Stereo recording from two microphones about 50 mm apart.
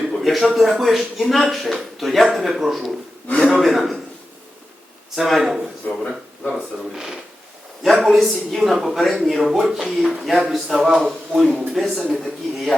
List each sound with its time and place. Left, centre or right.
0.1 s speech: centre
5.1 s speech: centre
5.8 s speech: left
6.5 s speech: centre
11.0 s speech: centre